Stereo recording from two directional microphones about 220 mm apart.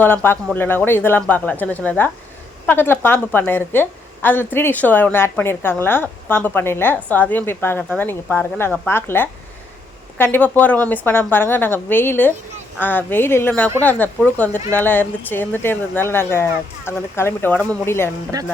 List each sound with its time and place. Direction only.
0.0 s a woman's voice: 10° left (ahead or behind)
18.3 s speech: 15° right (ahead or behind)